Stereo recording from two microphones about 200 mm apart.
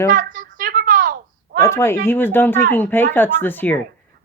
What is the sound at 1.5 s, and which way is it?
Speech, 15° left (ahead or behind).